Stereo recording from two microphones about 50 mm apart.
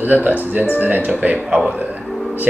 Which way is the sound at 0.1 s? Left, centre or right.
Right.